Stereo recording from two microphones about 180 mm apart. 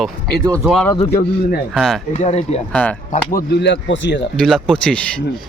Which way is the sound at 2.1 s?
40° left (ahead or behind).